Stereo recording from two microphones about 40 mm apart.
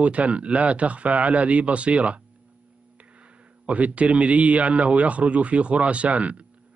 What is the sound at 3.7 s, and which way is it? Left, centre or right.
Speech, right.